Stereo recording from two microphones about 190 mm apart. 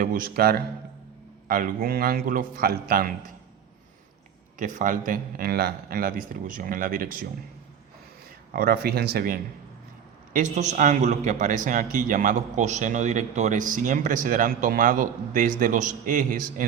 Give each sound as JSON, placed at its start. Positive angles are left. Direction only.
{"t": 0.0, "sound": "speech", "side_deg": -50}
{"t": 4.5, "sound": "speech", "side_deg": -45}
{"t": 8.5, "sound": "speech", "side_deg": -55}
{"t": 10.3, "sound": "speech", "side_deg": -40}